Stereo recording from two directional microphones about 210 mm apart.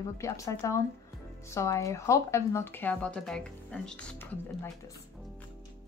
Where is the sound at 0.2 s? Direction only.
15° left (ahead or behind).